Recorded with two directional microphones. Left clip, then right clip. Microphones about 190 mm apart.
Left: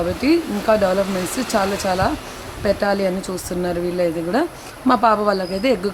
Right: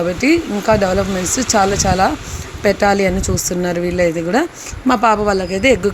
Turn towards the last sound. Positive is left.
turn(degrees=-10)  # may be behind; listen again after turning